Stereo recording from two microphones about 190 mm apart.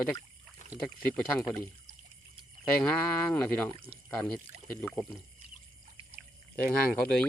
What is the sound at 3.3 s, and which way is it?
Speech, 5° left (ahead or behind).